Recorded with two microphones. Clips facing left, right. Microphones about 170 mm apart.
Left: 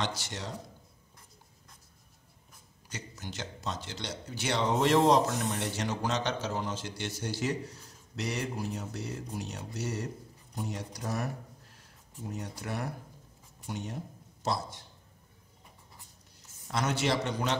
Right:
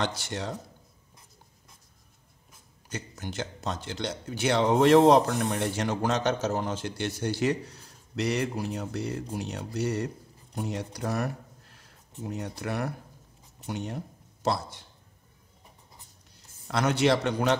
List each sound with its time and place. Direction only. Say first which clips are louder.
0.0 s speech: right 5 dB; 55° right (ahead or behind)
2.9 s a man's voice: right 5 dB; 55° right (ahead or behind)
16.6 s speech: right 6 dB; 65° right (ahead or behind)